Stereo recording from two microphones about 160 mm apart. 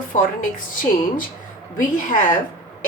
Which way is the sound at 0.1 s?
55° left (ahead or behind).